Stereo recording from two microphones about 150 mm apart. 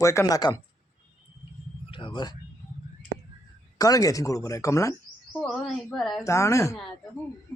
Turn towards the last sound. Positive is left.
turn(degrees=20)  # may be behind; listen again after turning